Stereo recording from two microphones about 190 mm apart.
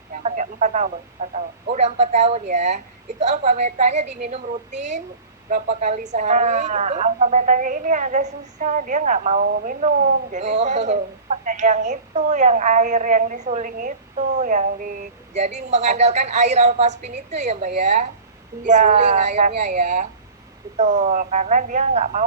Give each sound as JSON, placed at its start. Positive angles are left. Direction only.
{"t": 0.2, "sound": "radio", "side_deg": -35}
{"t": 1.7, "sound": "a woman's voice", "side_deg": -35}